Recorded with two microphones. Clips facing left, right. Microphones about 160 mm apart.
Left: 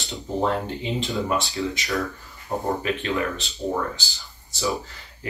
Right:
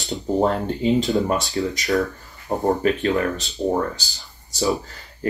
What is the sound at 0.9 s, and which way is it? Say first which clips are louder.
Speech: right 2 dB; 40° right (ahead or behind).